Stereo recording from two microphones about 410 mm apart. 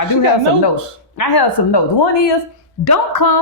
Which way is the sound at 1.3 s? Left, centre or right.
Left.